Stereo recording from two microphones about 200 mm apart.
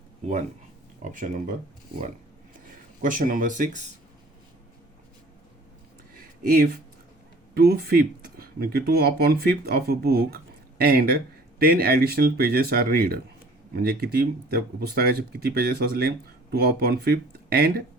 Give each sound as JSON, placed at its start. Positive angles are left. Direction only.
{"t": 1.0, "sound": "speech", "side_deg": -40}
{"t": 3.0, "sound": "speech", "side_deg": -40}
{"t": 6.1, "sound": "a sound", "side_deg": -45}
{"t": 7.5, "sound": "speech", "side_deg": -50}